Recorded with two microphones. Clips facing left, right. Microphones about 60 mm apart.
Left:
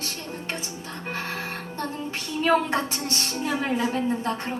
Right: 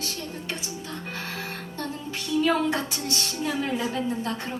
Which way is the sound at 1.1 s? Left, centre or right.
Left.